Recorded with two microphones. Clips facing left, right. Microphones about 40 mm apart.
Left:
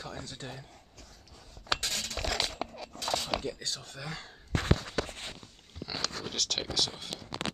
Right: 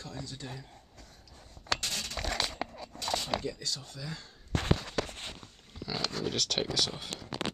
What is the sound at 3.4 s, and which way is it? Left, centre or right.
Speech, left.